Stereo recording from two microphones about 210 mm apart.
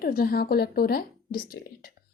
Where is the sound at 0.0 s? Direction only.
45° left (ahead or behind).